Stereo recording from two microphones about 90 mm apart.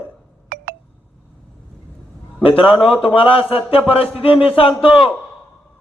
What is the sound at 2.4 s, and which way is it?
Speech, 90° left.